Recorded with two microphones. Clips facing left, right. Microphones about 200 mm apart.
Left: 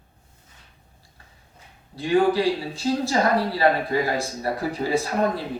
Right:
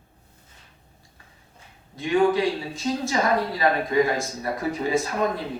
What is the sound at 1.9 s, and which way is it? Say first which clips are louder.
A man's voice: left 1 dB; 35° left (ahead or behind).